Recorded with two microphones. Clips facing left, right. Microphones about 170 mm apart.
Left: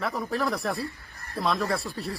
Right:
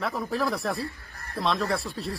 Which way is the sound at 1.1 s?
65° right (ahead or behind).